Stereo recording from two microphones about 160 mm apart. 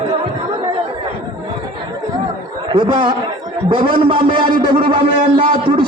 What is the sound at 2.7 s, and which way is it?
A man's voice, 30° right (ahead or behind).